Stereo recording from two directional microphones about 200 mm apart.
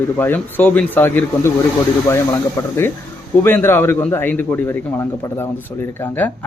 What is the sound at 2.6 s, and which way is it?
Speech, 10° left (ahead or behind).